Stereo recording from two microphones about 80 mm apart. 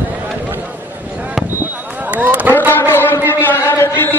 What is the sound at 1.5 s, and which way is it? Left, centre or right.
Basketball bounce, right.